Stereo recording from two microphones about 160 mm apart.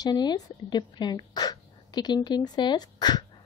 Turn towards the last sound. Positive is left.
turn(degrees=25)  # may be behind; listen again after turning